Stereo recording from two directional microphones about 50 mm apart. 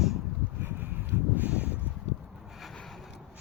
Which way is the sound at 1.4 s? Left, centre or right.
Right.